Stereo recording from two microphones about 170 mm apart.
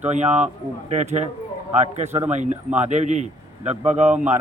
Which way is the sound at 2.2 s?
45° right (ahead or behind).